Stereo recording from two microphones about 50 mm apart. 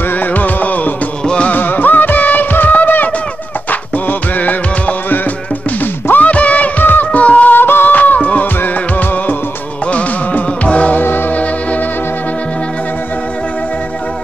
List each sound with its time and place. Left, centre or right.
0.1 s music: left
1.2 s music: centre
1.5 s music: left
6.8 s music: left
7.1 s music: left
9.8 s music: left
11.0 s music: left